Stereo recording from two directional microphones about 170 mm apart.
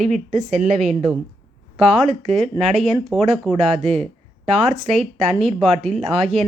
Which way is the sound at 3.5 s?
35° right (ahead or behind).